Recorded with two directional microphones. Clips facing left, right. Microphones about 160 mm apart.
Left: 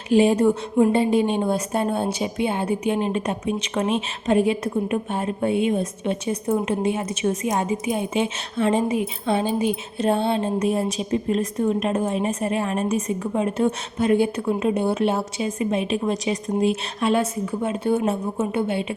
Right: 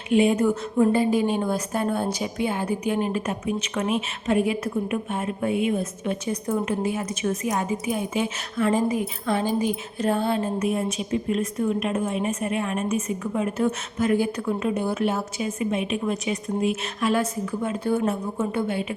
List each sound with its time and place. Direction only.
0.1 s a woman's voice: 35° left (ahead or behind)